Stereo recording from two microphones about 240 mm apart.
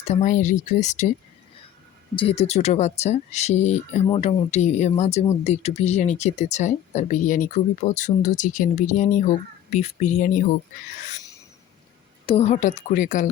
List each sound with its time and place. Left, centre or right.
0.1 s speech: left
2.1 s speech: left
12.2 s a woman's voice: left